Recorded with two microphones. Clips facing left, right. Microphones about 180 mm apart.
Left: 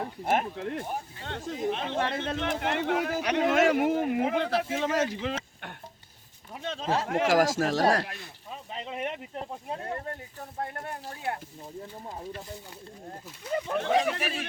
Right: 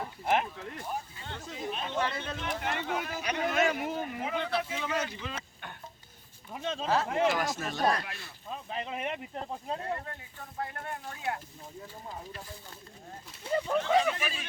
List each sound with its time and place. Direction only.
0.0 s speech: 45° left (ahead or behind)
0.5 s speech: 65° left (ahead or behind)
4.7 s speech: 45° left (ahead or behind)
5.2 s a sound: 80° left
6.5 s speech: centre (ahead or behind)
7.1 s speech: 90° left
8.4 s speech: centre (ahead or behind)
10.1 s speech: 40° left (ahead or behind)
13.5 s speech: 30° right (ahead or behind)
13.8 s speech: 60° left (ahead or behind)